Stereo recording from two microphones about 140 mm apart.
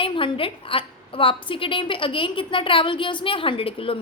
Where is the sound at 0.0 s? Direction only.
35° left (ahead or behind).